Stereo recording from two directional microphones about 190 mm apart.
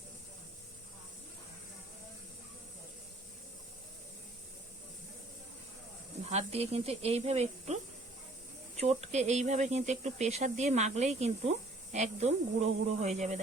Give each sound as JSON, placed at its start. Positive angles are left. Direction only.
{"t": 6.3, "sound": "speech", "side_deg": -35}
{"t": 8.8, "sound": "speech", "side_deg": -35}